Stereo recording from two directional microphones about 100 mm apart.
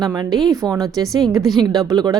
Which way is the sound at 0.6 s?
40° right (ahead or behind).